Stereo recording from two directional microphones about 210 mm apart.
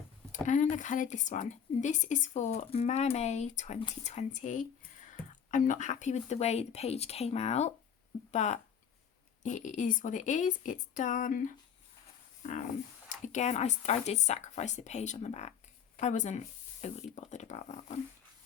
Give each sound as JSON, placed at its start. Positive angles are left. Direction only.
{"t": 0.3, "sound": "speech", "side_deg": 35}